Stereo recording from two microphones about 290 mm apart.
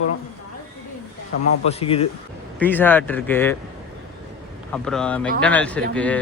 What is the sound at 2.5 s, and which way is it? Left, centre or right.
Speech, centre.